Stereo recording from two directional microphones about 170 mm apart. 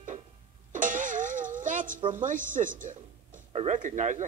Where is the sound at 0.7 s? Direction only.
50° right (ahead or behind).